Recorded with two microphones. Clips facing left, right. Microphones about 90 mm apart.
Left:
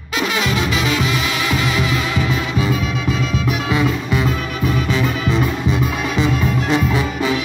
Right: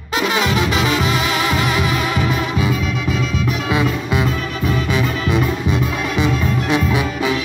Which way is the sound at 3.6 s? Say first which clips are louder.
Even; 15° right (ahead or behind).